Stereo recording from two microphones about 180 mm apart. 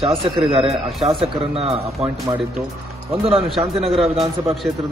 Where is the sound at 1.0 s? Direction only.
30° right (ahead or behind).